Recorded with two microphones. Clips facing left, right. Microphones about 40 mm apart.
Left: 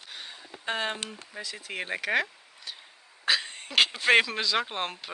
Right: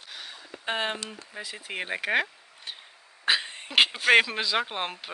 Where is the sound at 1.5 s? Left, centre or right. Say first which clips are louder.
Right 1 dB; centre.